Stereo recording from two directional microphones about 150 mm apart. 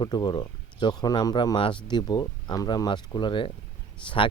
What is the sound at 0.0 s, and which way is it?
Speech, 25° left (ahead or behind).